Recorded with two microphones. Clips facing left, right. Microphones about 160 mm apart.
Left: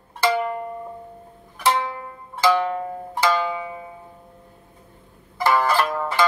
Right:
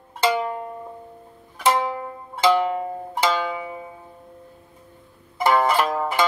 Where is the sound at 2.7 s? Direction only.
15° right (ahead or behind).